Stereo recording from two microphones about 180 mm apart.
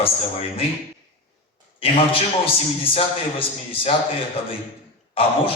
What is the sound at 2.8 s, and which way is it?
Speech, 30° left (ahead or behind).